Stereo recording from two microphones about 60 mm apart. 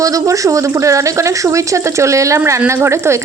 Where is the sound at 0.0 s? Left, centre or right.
Right.